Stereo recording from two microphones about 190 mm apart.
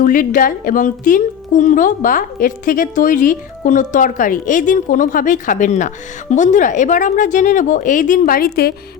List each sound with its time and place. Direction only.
0.0 s a woman's voice: 45° left (ahead or behind)